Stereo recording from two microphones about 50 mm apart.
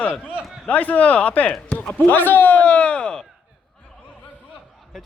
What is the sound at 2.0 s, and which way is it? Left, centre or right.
A man's voice, left.